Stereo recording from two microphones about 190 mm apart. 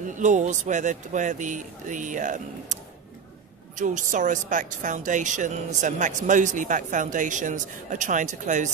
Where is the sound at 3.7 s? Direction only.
40° right (ahead or behind).